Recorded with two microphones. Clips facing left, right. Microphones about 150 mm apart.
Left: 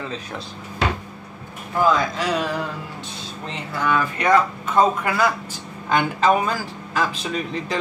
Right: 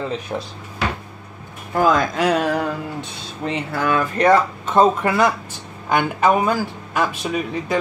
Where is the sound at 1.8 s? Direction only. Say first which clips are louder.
Right 3 dB; 55° right (ahead or behind).